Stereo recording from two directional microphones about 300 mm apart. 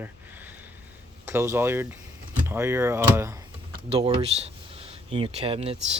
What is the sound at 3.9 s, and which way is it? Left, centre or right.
Speech, centre.